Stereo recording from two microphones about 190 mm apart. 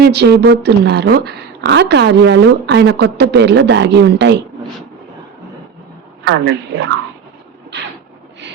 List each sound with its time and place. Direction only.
0.0 s a woman's voice: 60° right (ahead or behind)
6.2 s speech: 70° right (ahead or behind)